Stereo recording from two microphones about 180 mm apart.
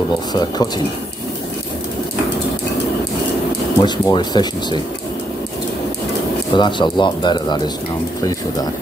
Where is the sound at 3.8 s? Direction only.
25° left (ahead or behind).